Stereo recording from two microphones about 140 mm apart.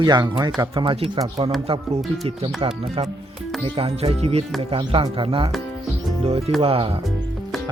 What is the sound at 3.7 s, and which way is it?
Speech, 40° right (ahead or behind).